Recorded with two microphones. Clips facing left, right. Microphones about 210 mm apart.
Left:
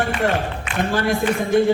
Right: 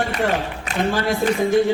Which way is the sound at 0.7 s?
40° right (ahead or behind).